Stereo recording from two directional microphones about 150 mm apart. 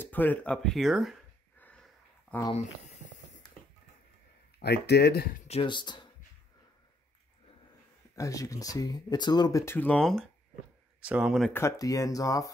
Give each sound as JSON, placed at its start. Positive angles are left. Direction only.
{"t": 0.0, "sound": "speech", "side_deg": 10}
{"t": 1.6, "sound": "sniff", "side_deg": 10}
{"t": 2.3, "sound": "speech", "side_deg": 10}
{"t": 4.6, "sound": "speech", "side_deg": 90}
{"t": 5.5, "sound": "speech", "side_deg": 35}
{"t": 8.2, "sound": "speech", "side_deg": 20}
{"t": 9.8, "sound": "speech", "side_deg": 5}
{"t": 11.0, "sound": "speech", "side_deg": -10}
{"t": 11.5, "sound": "speech", "side_deg": 20}